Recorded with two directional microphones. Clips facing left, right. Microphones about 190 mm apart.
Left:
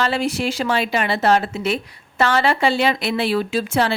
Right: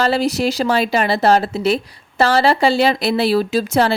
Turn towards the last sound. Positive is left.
turn(degrees=-40)  # may be behind; listen again after turning